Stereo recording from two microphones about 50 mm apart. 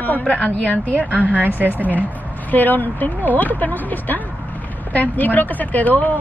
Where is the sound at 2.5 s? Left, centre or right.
Left.